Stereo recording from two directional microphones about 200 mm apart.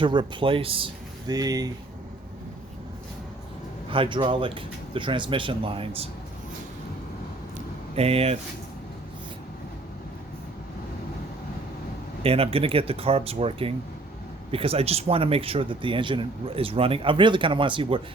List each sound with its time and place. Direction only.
0.0 s speech: 25° right (ahead or behind)
3.8 s speech: 25° right (ahead or behind)
7.9 s speech: 30° right (ahead or behind)
12.2 s speech: 30° right (ahead or behind)